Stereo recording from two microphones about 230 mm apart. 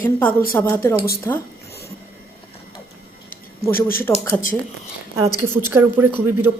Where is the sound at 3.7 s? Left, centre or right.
Left.